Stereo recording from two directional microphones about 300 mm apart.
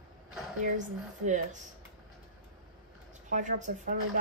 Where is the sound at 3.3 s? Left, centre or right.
Right.